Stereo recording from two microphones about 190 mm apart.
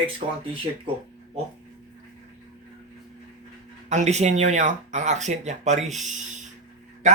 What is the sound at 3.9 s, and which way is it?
Speech, 35° right (ahead or behind).